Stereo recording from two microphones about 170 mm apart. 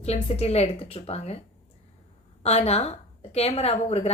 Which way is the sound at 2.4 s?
40° left (ahead or behind).